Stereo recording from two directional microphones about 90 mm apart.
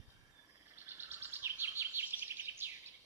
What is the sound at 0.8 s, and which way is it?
Bird vocalization, 25° right (ahead or behind).